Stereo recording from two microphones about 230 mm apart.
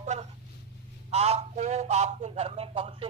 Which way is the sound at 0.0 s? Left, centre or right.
Right.